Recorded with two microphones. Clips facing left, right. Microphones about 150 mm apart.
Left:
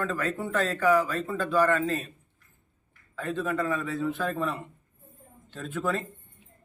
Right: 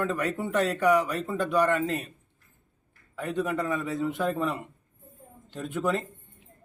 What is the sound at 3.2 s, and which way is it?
A man's voice, 20° right (ahead or behind).